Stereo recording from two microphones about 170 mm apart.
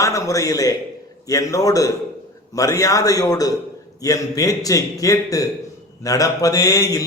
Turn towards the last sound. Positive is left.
turn(degrees=20)  # may be behind; listen again after turning